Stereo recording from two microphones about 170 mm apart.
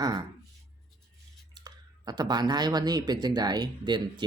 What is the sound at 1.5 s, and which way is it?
Speech, 25° right (ahead or behind).